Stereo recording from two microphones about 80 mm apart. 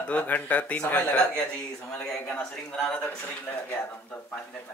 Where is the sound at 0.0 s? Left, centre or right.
Left.